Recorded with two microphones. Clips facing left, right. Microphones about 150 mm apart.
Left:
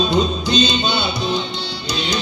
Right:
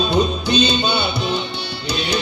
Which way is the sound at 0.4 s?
65° right (ahead or behind).